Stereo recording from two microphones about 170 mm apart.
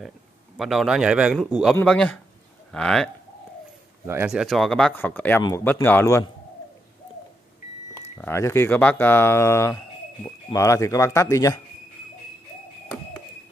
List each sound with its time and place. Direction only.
0.6 s speech: centre (ahead or behind)
4.0 s speech: 15° right (ahead or behind)
4.3 s speech: centre (ahead or behind); by 6.2 s 15° left (ahead or behind)
8.2 s speech: 15° left (ahead or behind)